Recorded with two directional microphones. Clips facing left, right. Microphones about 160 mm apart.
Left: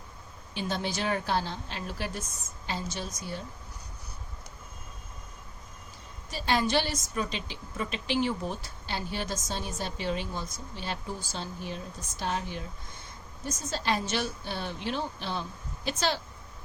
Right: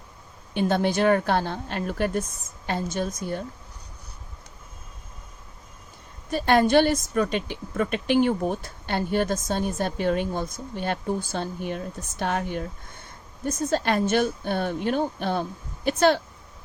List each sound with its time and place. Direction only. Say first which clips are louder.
0.5 s a woman's voice: right 10 dB; 55° right (ahead or behind)
6.3 s a woman's voice: right 9 dB; 55° right (ahead or behind)